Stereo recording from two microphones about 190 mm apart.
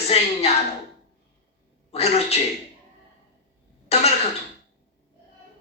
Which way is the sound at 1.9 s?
35° left (ahead or behind).